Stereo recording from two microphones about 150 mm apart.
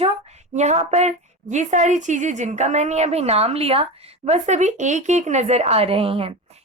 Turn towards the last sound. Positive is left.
turn(degrees=-45)  # may be behind; listen again after turning